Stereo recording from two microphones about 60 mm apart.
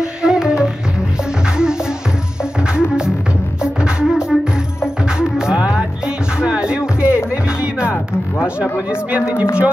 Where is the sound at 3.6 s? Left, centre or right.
Centre.